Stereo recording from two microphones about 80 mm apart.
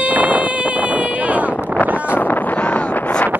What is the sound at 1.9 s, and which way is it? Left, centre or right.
Wind noise, left.